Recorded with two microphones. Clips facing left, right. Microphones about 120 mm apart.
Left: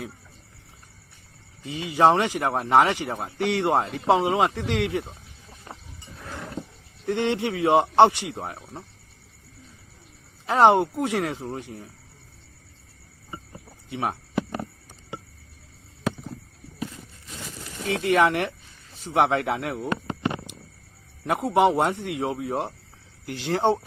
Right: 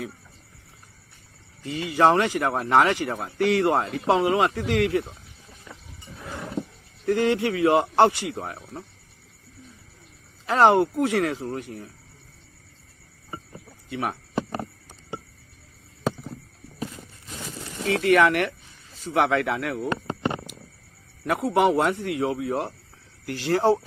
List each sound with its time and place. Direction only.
1.6 s a man's voice: 20° left (ahead or behind)
5.7 s vehicle: 55° left (ahead or behind)
6.1 s wild animals: 5° right (ahead or behind)
6.4 s wild animals: 15° right (ahead or behind)
7.0 s a man's voice: 25° left (ahead or behind)
10.4 s a man's voice: 20° left (ahead or behind)
13.9 s a man's voice: 25° left (ahead or behind)
17.8 s a man's voice: 25° left (ahead or behind)
20.1 s a sound: 35° right (ahead or behind)
21.2 s a man's voice: 25° left (ahead or behind)